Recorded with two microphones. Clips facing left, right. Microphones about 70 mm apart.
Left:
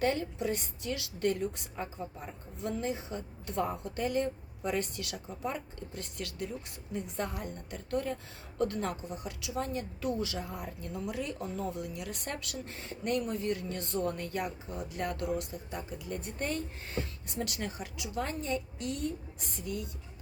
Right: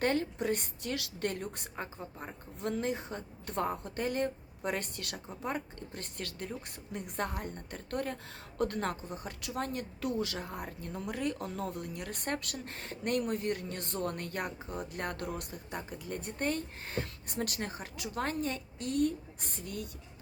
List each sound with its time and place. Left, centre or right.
0.0 s speech: right
1.7 s speech: right
2.6 s speech: right